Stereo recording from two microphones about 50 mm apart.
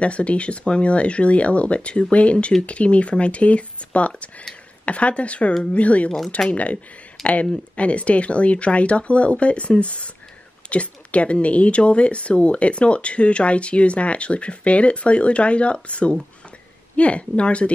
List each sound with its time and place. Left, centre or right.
0.0 s a woman's voice: left
7.2 s speech: centre
7.7 s a woman's voice: left